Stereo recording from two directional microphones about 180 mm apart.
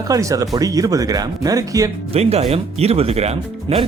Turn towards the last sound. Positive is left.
turn(degrees=-35)  # may be behind; listen again after turning